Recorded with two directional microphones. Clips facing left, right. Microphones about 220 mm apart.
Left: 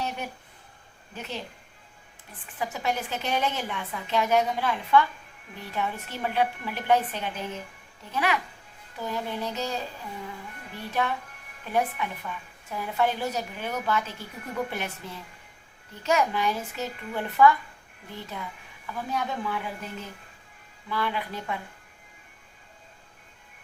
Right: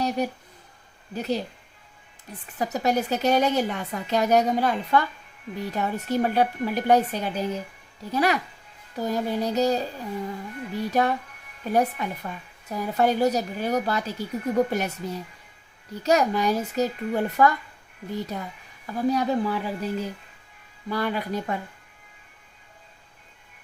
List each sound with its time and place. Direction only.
0.2 s a woman's voice: 40° right (ahead or behind)